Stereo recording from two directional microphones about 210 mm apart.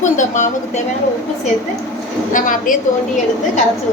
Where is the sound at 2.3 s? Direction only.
40° left (ahead or behind).